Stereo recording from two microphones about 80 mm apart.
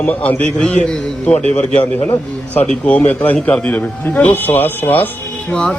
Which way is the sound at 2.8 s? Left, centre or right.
Centre.